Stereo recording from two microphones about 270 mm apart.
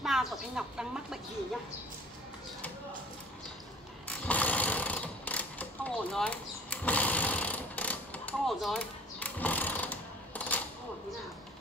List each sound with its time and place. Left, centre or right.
0.0 s speech: centre
4.1 s sewing machine: centre